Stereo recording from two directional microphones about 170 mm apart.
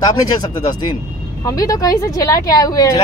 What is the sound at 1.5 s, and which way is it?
Speech, 20° left (ahead or behind).